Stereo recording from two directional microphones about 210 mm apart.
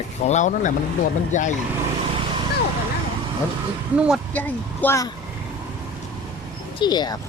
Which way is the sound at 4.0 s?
5° right (ahead or behind).